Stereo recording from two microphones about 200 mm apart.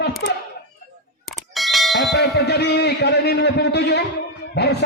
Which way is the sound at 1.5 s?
Centre (ahead or behind).